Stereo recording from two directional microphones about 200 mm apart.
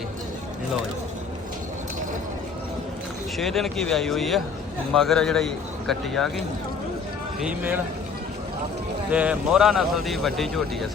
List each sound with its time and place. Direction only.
3.3 s a man's voice: centre (ahead or behind)
7.4 s speech: 10° right (ahead or behind)
9.0 s a man's voice: 5° right (ahead or behind)